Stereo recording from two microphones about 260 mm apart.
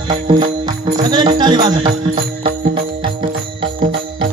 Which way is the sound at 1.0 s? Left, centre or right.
Centre.